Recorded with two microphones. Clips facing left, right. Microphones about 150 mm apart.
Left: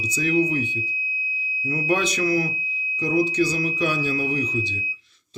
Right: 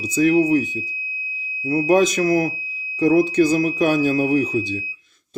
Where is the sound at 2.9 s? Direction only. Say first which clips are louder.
Right 7 dB; 55° right (ahead or behind).